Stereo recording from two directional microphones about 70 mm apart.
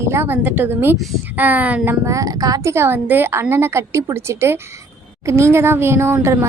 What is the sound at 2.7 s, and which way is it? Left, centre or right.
A woman's voice, right.